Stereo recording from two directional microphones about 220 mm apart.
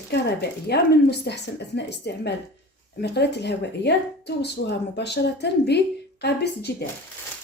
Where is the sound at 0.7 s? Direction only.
50° left (ahead or behind).